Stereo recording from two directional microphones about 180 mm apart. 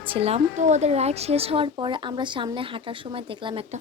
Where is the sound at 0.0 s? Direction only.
30° right (ahead or behind).